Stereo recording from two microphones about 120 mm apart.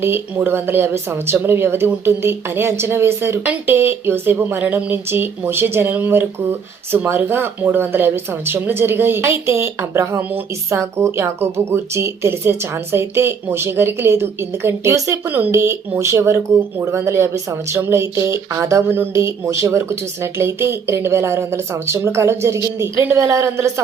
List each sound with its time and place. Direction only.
0.0 s speech: 20° right (ahead or behind)